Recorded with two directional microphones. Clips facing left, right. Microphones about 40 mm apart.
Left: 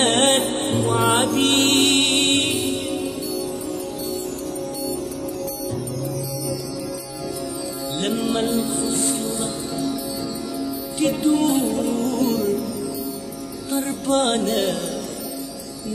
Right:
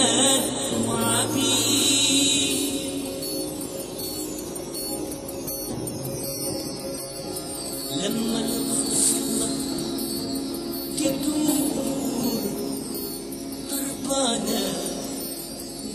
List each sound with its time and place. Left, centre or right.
0.0 s music: left
7.9 s music: left
11.0 s music: left
13.7 s music: left